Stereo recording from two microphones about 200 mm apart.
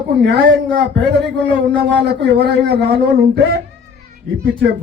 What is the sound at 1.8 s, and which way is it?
Speech, 55° right (ahead or behind).